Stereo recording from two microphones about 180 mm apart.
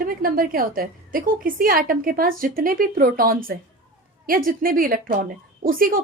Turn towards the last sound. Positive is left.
turn(degrees=-50)  # may be behind; listen again after turning